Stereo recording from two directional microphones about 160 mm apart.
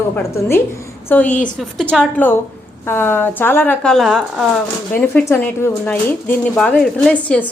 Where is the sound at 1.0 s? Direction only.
10° left (ahead or behind).